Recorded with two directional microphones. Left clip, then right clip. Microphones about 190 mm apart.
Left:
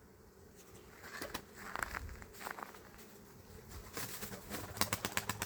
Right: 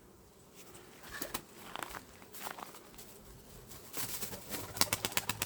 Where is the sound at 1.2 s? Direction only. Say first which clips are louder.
Right 2 dB; 70° right (ahead or behind).